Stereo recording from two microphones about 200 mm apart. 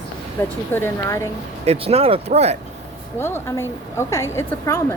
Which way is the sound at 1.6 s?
30° right (ahead or behind).